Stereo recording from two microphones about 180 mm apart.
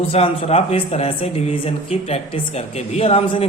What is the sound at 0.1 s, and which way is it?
A man's voice, 35° left (ahead or behind).